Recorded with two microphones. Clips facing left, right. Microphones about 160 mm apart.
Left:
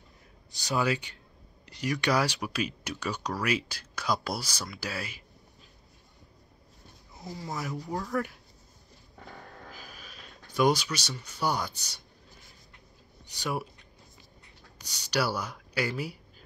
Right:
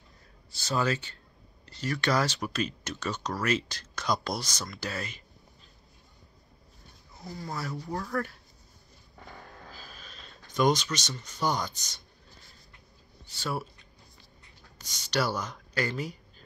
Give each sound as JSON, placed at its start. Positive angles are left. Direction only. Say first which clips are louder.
{"t": 0.5, "sound": "speech", "louder": "even", "side_deg": 15}
{"t": 7.4, "sound": "speech", "louder": "left 1 dB", "side_deg": 15}
{"t": 9.7, "sound": "a sound", "louder": "left 1 dB", "side_deg": 15}
{"t": 13.3, "sound": "speech", "louder": "left 1 dB", "side_deg": 15}
{"t": 14.8, "sound": "speech", "louder": "even", "side_deg": 10}